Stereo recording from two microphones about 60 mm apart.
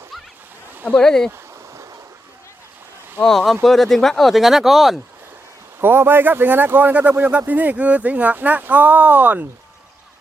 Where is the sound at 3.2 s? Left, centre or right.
Centre.